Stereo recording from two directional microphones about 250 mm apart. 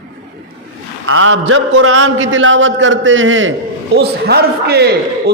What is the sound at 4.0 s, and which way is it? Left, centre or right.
Speech, right.